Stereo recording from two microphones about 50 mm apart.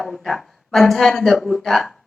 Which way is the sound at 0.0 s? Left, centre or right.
Centre.